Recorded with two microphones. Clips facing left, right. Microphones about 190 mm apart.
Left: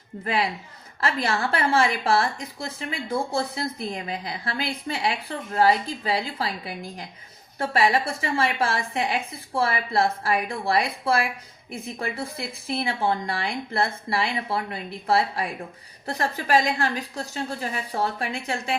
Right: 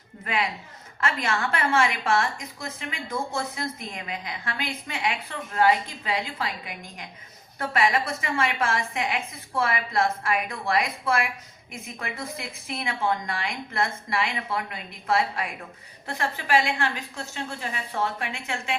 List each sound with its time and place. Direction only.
1.0 s a woman's voice: 35° left (ahead or behind)